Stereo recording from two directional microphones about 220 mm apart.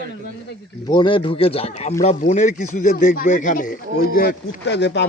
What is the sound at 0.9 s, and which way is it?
Speech, 20° left (ahead or behind).